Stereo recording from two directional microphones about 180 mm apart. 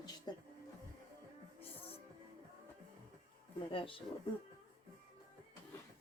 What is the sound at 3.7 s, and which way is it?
Speech, 30° left (ahead or behind).